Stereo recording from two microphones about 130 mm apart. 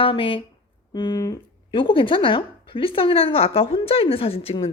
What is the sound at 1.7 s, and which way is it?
Speech, 40° left (ahead or behind).